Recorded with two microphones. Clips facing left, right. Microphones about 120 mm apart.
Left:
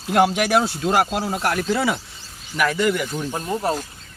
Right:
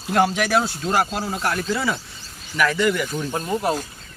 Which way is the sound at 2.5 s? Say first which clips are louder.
Even; 10° left (ahead or behind).